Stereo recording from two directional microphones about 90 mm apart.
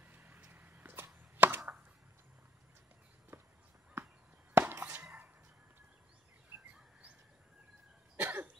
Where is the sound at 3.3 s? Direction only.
30° right (ahead or behind).